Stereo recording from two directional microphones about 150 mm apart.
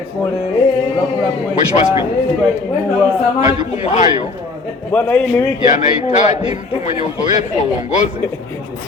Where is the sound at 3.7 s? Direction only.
45° left (ahead or behind).